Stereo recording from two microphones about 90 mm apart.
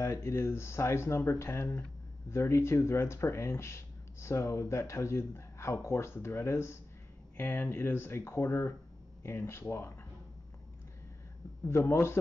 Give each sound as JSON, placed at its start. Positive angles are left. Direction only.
{"t": 0.0, "sound": "speech", "side_deg": 30}
{"t": 11.6, "sound": "speech", "side_deg": 30}